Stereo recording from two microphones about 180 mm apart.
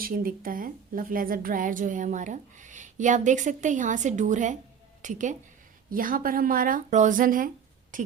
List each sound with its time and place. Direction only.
0.0 s a woman's voice: 50° right (ahead or behind)